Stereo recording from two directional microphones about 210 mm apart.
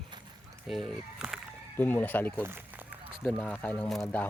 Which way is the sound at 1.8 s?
10° left (ahead or behind).